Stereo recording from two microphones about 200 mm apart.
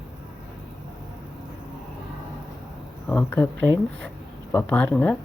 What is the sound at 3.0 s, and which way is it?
Speech, 5° left (ahead or behind).